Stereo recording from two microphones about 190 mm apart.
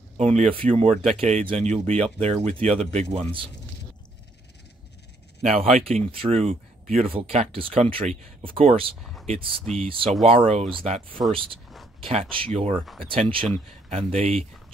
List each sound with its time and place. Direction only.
0.2 s speech: 35° right (ahead or behind)
1.9 s speech: 5° left (ahead or behind)
2.1 s speech: 30° right (ahead or behind)
5.4 s speech: 35° right (ahead or behind)
9.0 s a sound: centre (ahead or behind)
9.6 s speech: 5° left (ahead or behind)
9.8 s speech: 30° right (ahead or behind)